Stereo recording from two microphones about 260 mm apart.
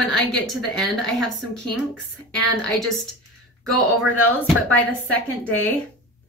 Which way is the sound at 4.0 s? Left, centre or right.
Centre.